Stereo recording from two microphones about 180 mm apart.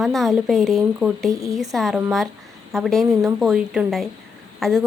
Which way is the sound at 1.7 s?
Centre (ahead or behind).